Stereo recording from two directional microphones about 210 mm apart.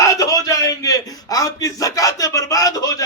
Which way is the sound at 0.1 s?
15° left (ahead or behind).